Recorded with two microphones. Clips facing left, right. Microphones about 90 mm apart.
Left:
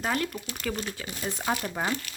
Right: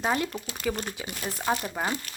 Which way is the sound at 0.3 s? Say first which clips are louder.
Right 1 dB; 30° right (ahead or behind).